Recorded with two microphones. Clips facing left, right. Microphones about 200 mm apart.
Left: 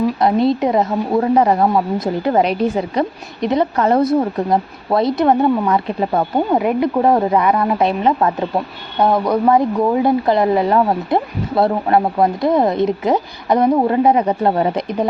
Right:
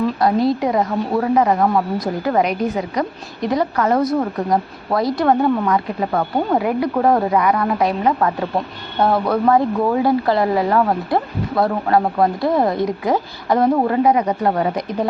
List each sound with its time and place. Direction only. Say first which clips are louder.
0.0 s speech: left 2 dB; 25° left (ahead or behind)